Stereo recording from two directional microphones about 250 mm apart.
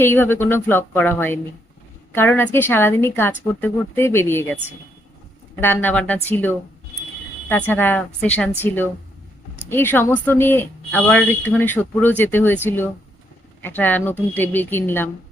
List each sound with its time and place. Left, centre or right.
0.0 s speech: centre
7.7 s speech: centre